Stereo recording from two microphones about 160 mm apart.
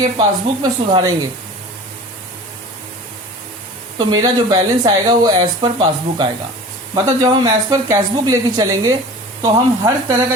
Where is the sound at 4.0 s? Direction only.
25° right (ahead or behind).